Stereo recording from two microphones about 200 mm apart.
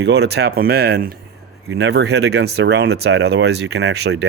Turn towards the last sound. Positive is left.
turn(degrees=-55)  # may be behind; listen again after turning